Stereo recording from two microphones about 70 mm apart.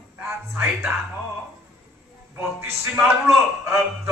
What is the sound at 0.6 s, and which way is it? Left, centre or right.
Music, right.